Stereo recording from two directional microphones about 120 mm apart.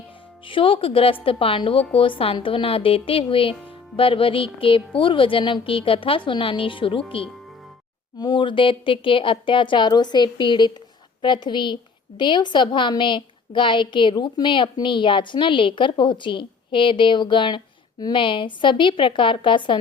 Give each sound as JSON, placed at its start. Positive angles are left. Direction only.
{"t": 0.4, "sound": "a woman's voice", "side_deg": 45}
{"t": 8.2, "sound": "a woman's voice", "side_deg": 40}